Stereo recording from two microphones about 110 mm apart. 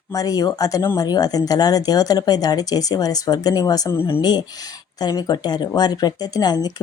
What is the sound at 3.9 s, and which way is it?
Speech, 20° left (ahead or behind).